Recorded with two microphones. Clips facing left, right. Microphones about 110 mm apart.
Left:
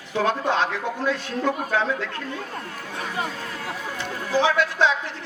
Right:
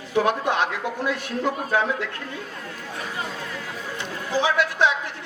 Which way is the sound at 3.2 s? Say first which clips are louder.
Left 2 dB; 45° left (ahead or behind).